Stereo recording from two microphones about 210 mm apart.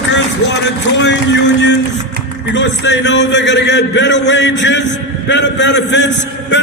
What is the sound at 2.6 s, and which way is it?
A man's voice, 60° left (ahead or behind).